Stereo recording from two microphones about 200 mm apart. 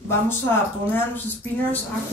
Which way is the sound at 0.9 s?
10° left (ahead or behind).